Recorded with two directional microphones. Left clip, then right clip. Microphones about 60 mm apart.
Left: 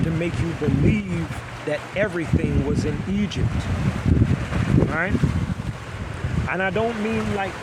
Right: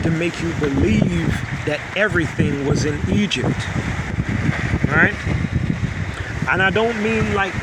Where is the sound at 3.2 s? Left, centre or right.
Right.